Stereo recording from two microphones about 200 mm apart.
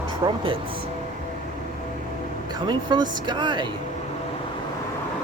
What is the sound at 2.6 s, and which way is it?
Speech, 20° right (ahead or behind).